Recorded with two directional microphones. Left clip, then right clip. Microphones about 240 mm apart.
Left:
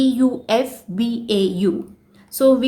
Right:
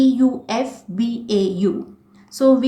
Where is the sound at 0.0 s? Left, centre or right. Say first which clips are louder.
Right 1 dB; left.